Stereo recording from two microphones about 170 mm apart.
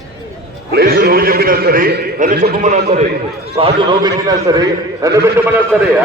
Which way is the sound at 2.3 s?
70° right (ahead or behind).